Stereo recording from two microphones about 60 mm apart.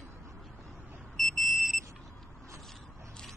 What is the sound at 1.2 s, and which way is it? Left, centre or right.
Smoke detector, centre.